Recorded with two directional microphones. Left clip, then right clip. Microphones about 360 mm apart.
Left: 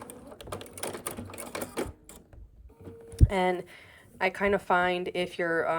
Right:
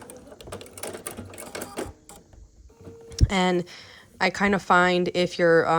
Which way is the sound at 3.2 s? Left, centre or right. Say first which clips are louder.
Right 2 dB; centre.